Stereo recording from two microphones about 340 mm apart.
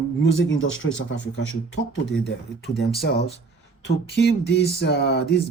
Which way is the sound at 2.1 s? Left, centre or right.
Left.